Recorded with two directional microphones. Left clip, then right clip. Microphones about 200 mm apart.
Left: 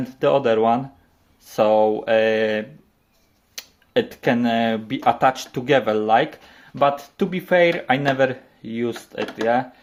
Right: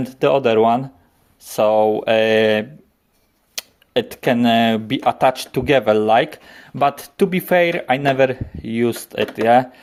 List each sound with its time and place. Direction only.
0.0 s speech: 30° right (ahead or behind)